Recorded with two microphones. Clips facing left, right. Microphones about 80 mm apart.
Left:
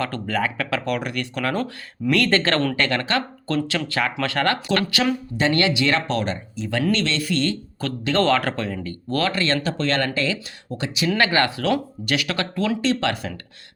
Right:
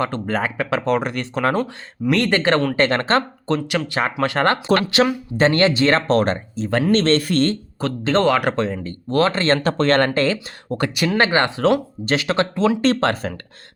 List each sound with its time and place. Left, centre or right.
0.3 s speech: right
2.7 s speech: right
7.8 s speech: right
8.2 s speech: centre; by 11.1 s right
11.1 s speech: right
12.8 s speech: right